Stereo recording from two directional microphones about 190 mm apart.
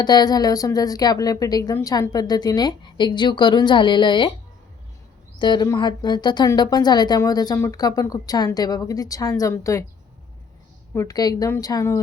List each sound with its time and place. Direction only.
0.0 s speech: 20° left (ahead or behind)
5.4 s speech: 25° left (ahead or behind)
10.9 s a woman's voice: 20° left (ahead or behind)